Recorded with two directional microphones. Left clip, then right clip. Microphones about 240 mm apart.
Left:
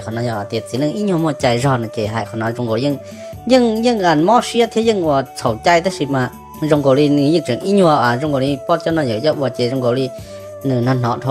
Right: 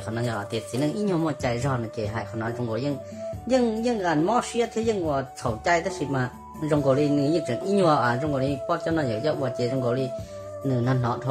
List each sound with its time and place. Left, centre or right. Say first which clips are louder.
0.1 s speech: left 8 dB; left